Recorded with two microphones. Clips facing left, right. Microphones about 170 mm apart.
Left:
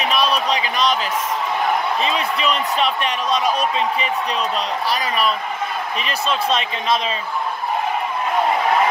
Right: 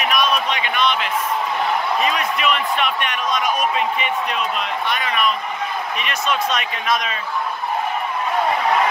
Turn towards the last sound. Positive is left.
turn(degrees=30)  # may be behind; listen again after turning